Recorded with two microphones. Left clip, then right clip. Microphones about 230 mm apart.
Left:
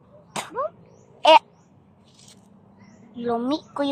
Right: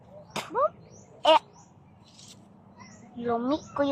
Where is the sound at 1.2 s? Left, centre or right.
Centre.